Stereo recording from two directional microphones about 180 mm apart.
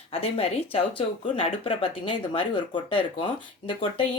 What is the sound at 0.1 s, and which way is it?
Speech, 35° left (ahead or behind).